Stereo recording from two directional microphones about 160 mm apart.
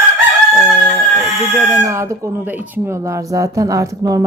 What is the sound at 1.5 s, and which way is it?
Speech, 20° right (ahead or behind).